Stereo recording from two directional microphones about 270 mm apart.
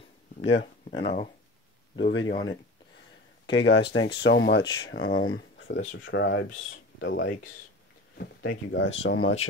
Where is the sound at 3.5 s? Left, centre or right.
Left.